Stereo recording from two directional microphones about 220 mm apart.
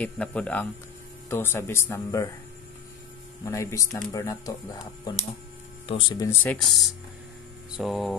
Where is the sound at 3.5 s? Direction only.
15° left (ahead or behind).